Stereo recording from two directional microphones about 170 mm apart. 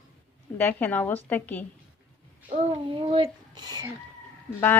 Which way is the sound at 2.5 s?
30° right (ahead or behind).